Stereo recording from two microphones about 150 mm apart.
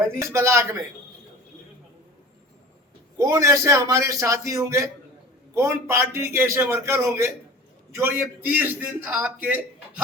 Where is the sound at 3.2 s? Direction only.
20° right (ahead or behind).